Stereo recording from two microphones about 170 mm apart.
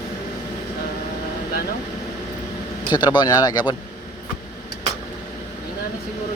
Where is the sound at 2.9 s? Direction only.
25° left (ahead or behind).